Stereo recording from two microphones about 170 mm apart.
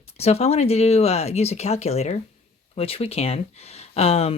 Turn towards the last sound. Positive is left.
turn(degrees=35)  # may be behind; listen again after turning